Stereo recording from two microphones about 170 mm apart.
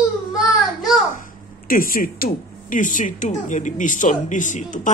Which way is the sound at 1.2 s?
55° left (ahead or behind).